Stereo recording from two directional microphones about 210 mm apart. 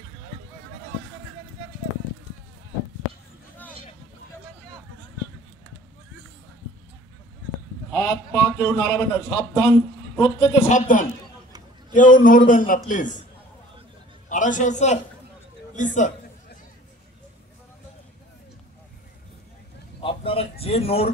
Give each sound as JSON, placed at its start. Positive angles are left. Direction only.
{"t": 7.9, "sound": "a man's voice", "side_deg": 15}
{"t": 9.6, "sound": "a man's voice", "side_deg": 25}
{"t": 14.3, "sound": "a man's voice", "side_deg": 35}
{"t": 20.0, "sound": "a sound", "side_deg": 25}